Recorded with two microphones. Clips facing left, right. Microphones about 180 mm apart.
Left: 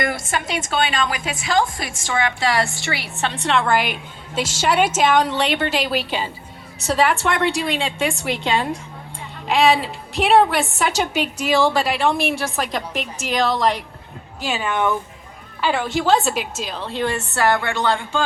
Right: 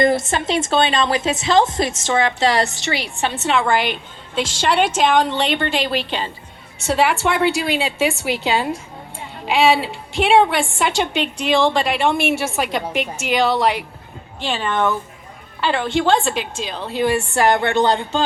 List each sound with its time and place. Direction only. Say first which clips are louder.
0.0 s a woman's voice: right 7 dB; 25° right (ahead or behind)